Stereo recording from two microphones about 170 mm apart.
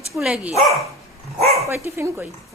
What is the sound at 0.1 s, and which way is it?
Speech, 5° right (ahead or behind).